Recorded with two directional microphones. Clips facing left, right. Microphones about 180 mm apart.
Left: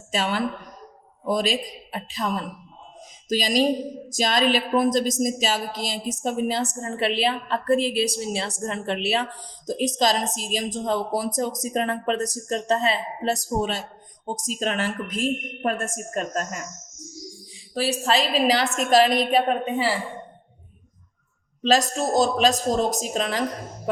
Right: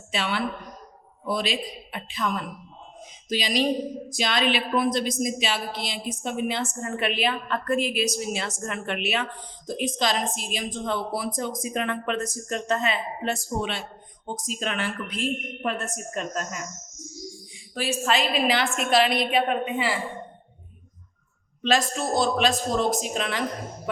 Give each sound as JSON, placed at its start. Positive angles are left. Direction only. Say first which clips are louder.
{"t": 0.1, "sound": "a woman's voice", "louder": "left 3 dB", "side_deg": 45}
{"t": 17.7, "sound": "a woman's voice", "louder": "left 2 dB", "side_deg": 35}
{"t": 21.6, "sound": "a woman's voice", "louder": "left 3 dB", "side_deg": 40}